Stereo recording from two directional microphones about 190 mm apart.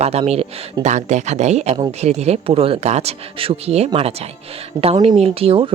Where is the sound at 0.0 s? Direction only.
35° right (ahead or behind).